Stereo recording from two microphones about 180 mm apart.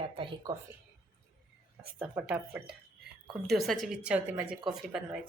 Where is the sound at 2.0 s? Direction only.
5° right (ahead or behind).